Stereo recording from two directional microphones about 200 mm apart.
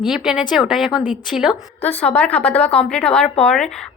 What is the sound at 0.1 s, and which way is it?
A woman's voice, 5° right (ahead or behind).